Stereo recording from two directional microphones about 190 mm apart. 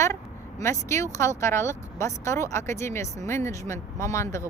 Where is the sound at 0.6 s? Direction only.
15° left (ahead or behind).